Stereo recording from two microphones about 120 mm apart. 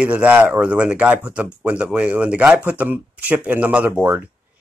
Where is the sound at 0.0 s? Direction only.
10° right (ahead or behind).